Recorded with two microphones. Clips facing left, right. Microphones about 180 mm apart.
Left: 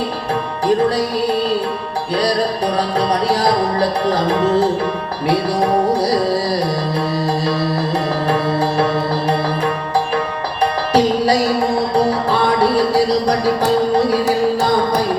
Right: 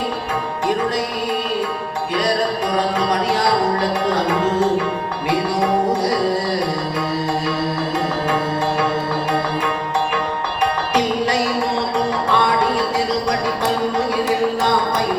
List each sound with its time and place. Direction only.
2.7 s music: 35° left (ahead or behind)
5.9 s music: 35° left (ahead or behind)
10.9 s music: 35° left (ahead or behind)